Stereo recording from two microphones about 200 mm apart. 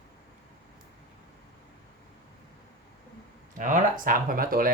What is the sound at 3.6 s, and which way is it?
Speech, 40° right (ahead or behind).